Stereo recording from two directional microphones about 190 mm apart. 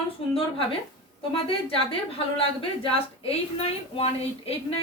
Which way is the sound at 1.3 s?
30° left (ahead or behind).